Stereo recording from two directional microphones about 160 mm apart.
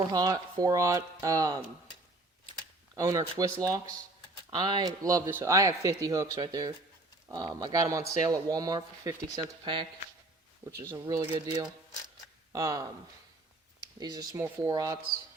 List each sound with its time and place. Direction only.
0.0 s speech: 25° right (ahead or behind)
2.9 s speech: 20° right (ahead or behind)
10.9 s speech: 25° right (ahead or behind)
14.0 s speech: 25° right (ahead or behind)